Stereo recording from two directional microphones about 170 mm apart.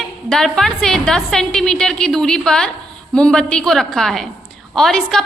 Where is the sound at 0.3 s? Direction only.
Centre (ahead or behind).